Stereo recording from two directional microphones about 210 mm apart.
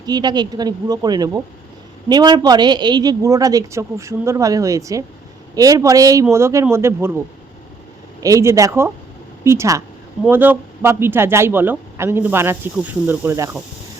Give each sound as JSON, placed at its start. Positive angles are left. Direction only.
{"t": 0.0, "sound": "a man's voice", "side_deg": -20}
{"t": 8.2, "sound": "a man's voice", "side_deg": -15}